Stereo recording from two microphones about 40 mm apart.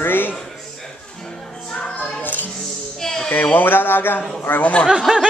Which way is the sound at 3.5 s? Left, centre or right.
Left.